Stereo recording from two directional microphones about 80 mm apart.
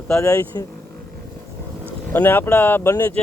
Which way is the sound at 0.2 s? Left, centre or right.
Left.